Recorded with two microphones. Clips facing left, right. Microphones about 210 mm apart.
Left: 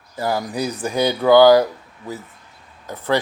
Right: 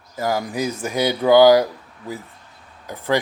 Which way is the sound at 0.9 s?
15° right (ahead or behind).